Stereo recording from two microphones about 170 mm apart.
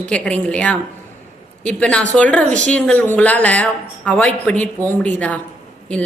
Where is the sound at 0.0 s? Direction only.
5° left (ahead or behind).